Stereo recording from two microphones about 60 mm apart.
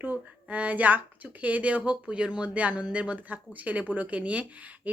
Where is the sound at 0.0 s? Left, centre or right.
Right.